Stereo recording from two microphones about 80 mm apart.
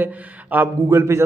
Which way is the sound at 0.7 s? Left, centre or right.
Right.